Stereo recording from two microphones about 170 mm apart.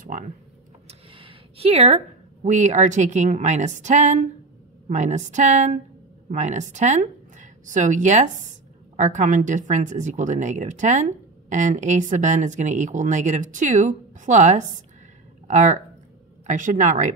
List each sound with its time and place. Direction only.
0.0 s speech: 50° right (ahead or behind)
0.8 s a woman's voice: 35° right (ahead or behind); by 17.1 s 50° right (ahead or behind)